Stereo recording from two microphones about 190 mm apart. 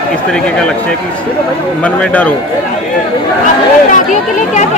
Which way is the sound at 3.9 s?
40° left (ahead or behind).